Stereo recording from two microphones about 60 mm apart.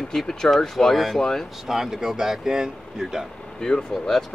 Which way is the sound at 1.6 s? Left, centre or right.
Centre.